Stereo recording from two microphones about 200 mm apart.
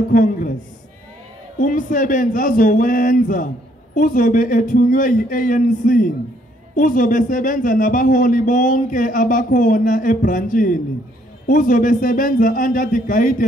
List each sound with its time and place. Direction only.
0.1 s a man's voice: 45° left (ahead or behind)
1.6 s a man's voice: 40° left (ahead or behind)